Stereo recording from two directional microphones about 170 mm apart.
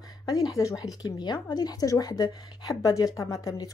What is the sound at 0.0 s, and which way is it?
A woman's voice, 20° left (ahead or behind).